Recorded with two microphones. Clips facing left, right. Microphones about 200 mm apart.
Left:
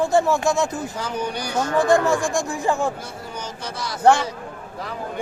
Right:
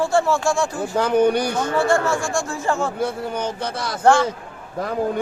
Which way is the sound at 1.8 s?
15° left (ahead or behind).